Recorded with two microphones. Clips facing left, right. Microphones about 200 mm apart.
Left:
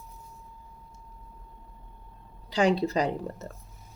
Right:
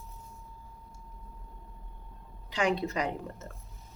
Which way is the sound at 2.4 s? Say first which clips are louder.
Left 5 dB; 35° left (ahead or behind).